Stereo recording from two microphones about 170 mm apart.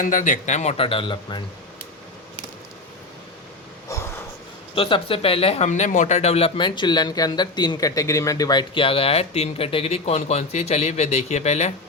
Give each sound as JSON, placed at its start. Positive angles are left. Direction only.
{"t": 0.0, "sound": "speech", "side_deg": 50}
{"t": 4.7, "sound": "speech", "side_deg": 30}